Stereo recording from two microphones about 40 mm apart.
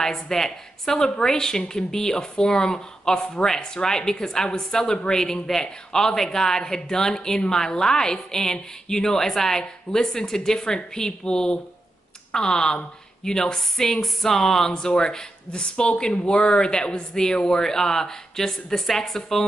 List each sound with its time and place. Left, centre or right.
0.0 s a woman's voice: centre